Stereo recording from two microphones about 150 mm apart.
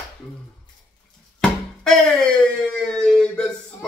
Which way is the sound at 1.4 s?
5° left (ahead or behind).